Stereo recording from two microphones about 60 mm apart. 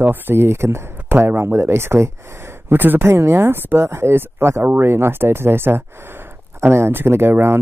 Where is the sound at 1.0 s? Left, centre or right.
Right.